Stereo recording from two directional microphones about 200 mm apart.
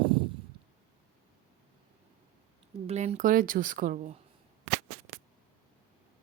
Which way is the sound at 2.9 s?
35° right (ahead or behind).